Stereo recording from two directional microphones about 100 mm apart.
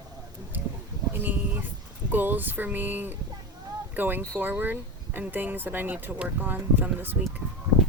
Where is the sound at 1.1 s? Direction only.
20° right (ahead or behind).